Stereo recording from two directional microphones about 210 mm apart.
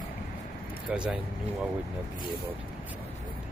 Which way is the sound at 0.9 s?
5° right (ahead or behind).